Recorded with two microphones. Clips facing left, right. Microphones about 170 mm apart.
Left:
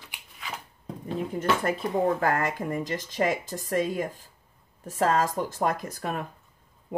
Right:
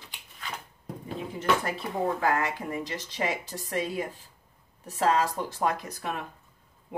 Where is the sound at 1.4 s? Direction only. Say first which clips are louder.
Left 1 dB; 50° left (ahead or behind).